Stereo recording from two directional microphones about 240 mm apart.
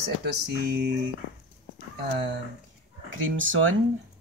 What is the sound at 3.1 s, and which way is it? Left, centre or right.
Speech, right.